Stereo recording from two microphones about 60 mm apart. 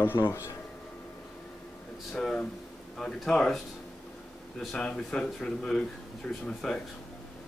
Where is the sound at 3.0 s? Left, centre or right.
Centre.